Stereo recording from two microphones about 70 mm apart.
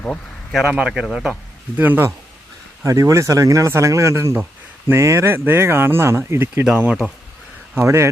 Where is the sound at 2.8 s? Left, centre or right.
Right.